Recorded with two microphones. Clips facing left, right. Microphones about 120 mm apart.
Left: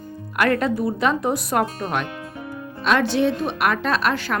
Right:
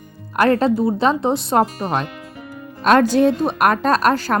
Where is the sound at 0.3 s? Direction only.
30° right (ahead or behind).